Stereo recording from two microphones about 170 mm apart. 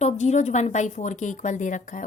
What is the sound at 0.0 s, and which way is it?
A woman's voice, 40° left (ahead or behind).